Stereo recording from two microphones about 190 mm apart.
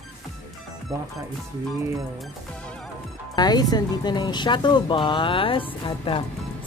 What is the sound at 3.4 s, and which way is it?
Speech, 20° left (ahead or behind).